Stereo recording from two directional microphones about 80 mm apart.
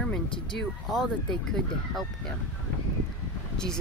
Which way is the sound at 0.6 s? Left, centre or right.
Centre.